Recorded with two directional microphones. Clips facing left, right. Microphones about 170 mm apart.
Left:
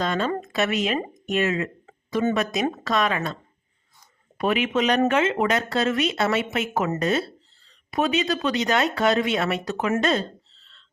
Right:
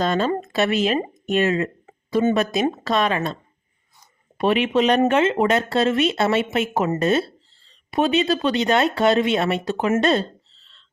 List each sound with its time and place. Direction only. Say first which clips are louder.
0.0 s speech: right 4 dB; 35° right (ahead or behind)
4.4 s speech: right 4 dB; 30° right (ahead or behind)